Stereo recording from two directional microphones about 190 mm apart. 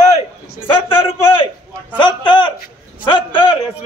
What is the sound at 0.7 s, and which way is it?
A man's voice, 30° left (ahead or behind).